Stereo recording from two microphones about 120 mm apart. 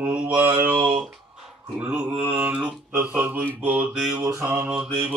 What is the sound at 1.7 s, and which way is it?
Speech, 10° right (ahead or behind).